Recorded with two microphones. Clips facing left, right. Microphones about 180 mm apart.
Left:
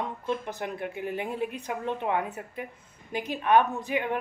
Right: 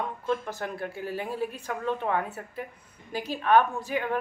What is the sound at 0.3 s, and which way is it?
A woman's voice, 15° left (ahead or behind).